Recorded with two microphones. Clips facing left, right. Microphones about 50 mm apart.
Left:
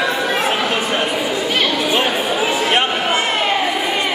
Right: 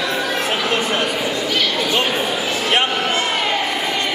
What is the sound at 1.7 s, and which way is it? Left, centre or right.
Chatter, centre.